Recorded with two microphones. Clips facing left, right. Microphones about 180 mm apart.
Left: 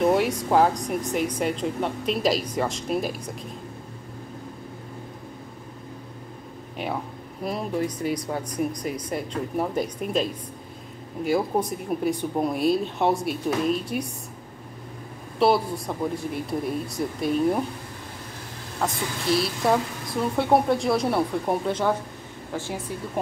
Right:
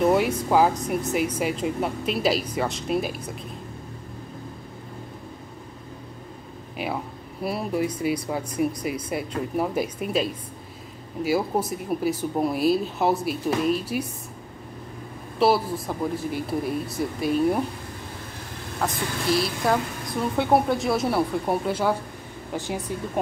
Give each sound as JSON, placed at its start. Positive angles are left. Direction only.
{"t": 0.0, "sound": "a woman's voice", "side_deg": 0}
{"t": 7.4, "sound": "a woman's voice", "side_deg": -5}
{"t": 15.3, "sound": "a woman's voice", "side_deg": 0}
{"t": 18.8, "sound": "a woman's voice", "side_deg": 0}
{"t": 22.6, "sound": "speech", "side_deg": -20}